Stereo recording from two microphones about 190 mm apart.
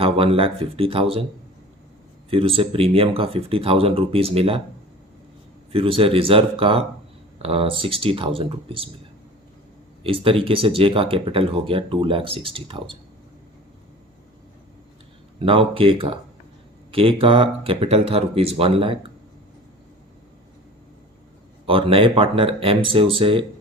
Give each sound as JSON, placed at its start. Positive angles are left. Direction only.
{"t": 0.0, "sound": "speech", "side_deg": -30}
{"t": 2.3, "sound": "speech", "side_deg": -30}
{"t": 5.7, "sound": "speech", "side_deg": -30}
{"t": 10.0, "sound": "speech", "side_deg": -30}
{"t": 15.4, "sound": "speech", "side_deg": -30}
{"t": 21.7, "sound": "speech", "side_deg": -30}